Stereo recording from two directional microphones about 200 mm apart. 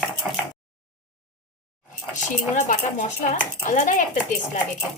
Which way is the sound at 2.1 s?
40° left (ahead or behind).